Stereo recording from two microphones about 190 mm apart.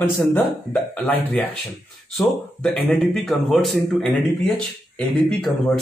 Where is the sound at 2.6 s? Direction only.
5° left (ahead or behind).